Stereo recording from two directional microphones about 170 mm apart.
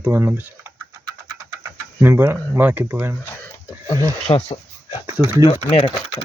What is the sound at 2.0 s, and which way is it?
Speech, 15° right (ahead or behind).